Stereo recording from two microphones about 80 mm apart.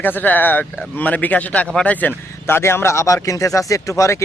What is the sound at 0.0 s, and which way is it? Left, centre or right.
Speech, left.